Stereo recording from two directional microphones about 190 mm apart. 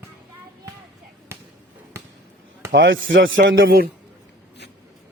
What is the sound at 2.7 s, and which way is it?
Speech, 70° right (ahead or behind).